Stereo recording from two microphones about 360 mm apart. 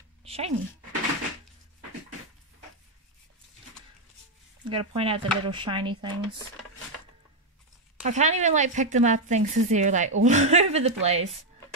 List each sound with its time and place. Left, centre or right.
0.2 s a sound: centre
4.6 s speech: centre
8.0 s speech: centre